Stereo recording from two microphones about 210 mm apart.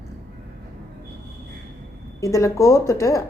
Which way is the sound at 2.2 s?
15° left (ahead or behind).